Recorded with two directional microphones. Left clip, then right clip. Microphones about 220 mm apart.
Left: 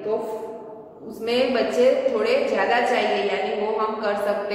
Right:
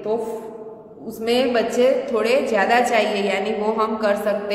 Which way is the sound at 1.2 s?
50° right (ahead or behind).